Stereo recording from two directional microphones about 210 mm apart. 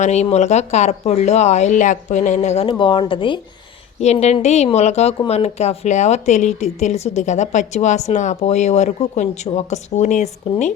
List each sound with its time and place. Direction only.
0.0 s speech: 30° left (ahead or behind)